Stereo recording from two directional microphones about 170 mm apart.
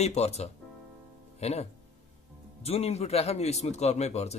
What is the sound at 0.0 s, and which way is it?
Speech, 40° left (ahead or behind).